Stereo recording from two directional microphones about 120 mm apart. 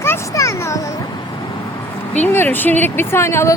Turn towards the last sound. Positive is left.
turn(degrees=20)  # may be behind; listen again after turning